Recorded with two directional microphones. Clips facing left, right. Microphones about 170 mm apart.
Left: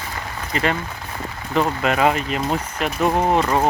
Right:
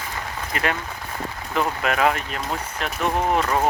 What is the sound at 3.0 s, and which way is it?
Speech, 30° left (ahead or behind).